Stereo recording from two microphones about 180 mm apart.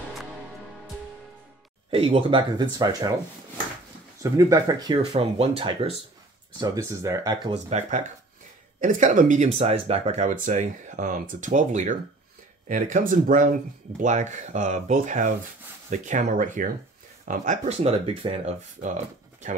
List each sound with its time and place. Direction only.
1.9 s speech: 30° right (ahead or behind)
4.2 s speech: 20° right (ahead or behind)
6.6 s speech: 20° right (ahead or behind)
7.5 s speech: 40° right (ahead or behind)